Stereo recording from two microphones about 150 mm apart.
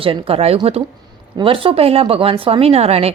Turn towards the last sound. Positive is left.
turn(degrees=-45)  # may be behind; listen again after turning